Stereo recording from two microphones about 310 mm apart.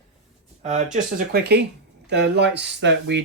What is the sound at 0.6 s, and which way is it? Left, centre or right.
Speech, right.